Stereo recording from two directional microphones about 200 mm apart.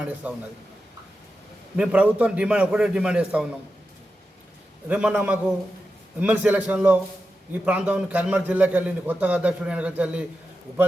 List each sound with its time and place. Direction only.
0.0 s a man's voice: 5° right (ahead or behind)
1.7 s a man's voice: 5° right (ahead or behind)
4.9 s a man's voice: 5° right (ahead or behind)